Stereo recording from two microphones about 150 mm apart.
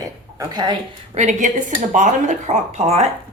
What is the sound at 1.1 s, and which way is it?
Speech, 50° right (ahead or behind).